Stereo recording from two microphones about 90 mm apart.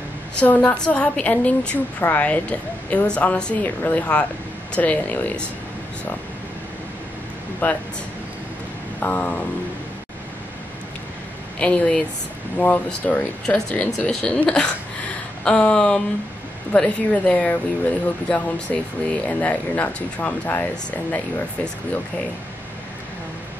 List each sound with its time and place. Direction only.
0.4 s speech: 15° left (ahead or behind)
7.6 s speech: 20° left (ahead or behind)
9.0 s speech: 20° left (ahead or behind)
11.6 s speech: 10° left (ahead or behind)